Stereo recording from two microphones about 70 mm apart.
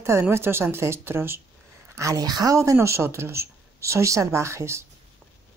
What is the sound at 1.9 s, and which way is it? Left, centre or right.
Speech, right.